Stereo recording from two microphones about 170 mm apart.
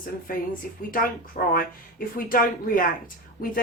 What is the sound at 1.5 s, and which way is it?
Speech, 55° left (ahead or behind).